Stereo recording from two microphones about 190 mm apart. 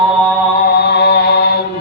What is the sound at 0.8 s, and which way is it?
Chant, 60° left (ahead or behind).